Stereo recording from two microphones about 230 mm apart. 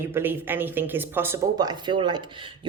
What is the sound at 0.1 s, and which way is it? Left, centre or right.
Speech, centre.